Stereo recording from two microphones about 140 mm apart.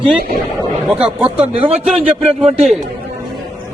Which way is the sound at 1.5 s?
45° right (ahead or behind).